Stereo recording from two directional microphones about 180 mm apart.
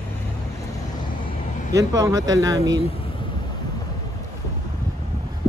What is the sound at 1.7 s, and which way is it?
Speech, 20° right (ahead or behind).